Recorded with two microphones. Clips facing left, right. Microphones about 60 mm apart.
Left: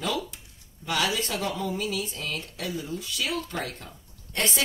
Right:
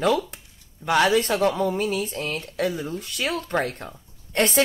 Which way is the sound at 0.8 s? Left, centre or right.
Right.